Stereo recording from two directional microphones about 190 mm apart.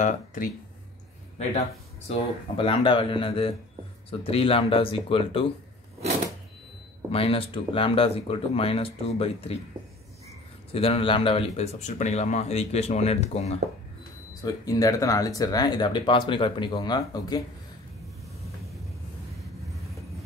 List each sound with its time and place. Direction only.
0.0 s speech: 45° left (ahead or behind)
2.0 s speech: 30° left (ahead or behind)
7.1 s speech: 30° left (ahead or behind)
10.7 s speech: 30° left (ahead or behind)
14.4 s speech: 20° left (ahead or behind)